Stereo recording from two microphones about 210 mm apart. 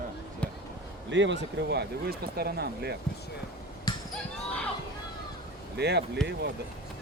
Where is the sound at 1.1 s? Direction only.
60° right (ahead or behind).